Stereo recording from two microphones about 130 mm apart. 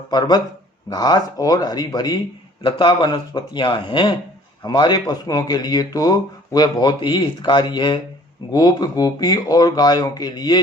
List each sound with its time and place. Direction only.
0.1 s speech: 30° left (ahead or behind)